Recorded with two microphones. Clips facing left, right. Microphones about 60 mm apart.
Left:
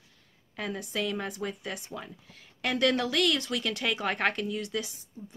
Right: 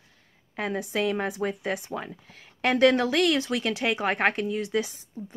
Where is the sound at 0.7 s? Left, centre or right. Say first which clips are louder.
Right 6 dB; right.